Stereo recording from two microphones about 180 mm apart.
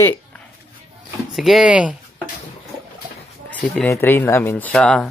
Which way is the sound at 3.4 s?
5° left (ahead or behind).